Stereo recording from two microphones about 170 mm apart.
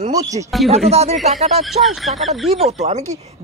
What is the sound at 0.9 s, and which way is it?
Speech, 40° right (ahead or behind).